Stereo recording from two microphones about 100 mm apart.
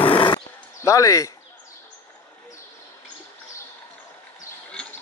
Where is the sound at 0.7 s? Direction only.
30° left (ahead or behind).